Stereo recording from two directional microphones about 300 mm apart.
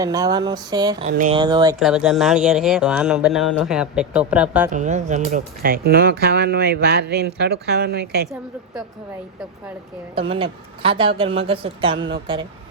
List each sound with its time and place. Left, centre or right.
0.0 s speech: centre
1.0 s speech: right
1.4 s speech: centre
1.8 s speech: centre
4.7 s speech: right
10.2 s speech: centre